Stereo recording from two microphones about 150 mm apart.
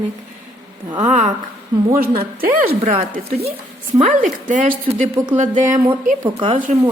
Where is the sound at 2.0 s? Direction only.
75° right (ahead or behind).